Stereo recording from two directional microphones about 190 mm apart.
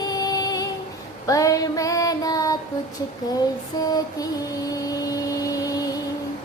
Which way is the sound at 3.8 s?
20° left (ahead or behind).